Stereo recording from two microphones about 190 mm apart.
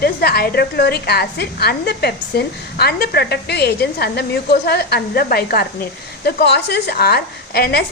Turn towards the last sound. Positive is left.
turn(degrees=55)  # may be behind; listen again after turning